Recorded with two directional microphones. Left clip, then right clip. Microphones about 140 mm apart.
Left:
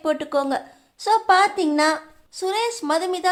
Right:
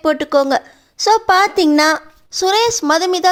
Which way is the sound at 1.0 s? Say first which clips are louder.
Right 5 dB; 50° right (ahead or behind).